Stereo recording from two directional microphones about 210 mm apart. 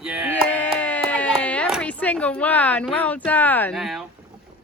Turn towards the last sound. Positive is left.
turn(degrees=0)  # may be behind; listen again after turning